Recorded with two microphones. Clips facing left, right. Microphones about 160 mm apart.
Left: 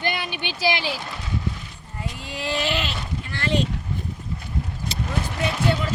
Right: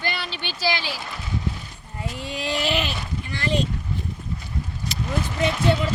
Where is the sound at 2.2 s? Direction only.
20° right (ahead or behind).